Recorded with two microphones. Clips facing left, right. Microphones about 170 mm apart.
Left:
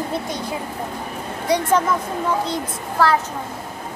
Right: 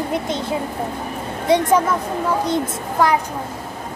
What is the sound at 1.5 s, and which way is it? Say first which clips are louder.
Child singing: right 4 dB; 25° right (ahead or behind).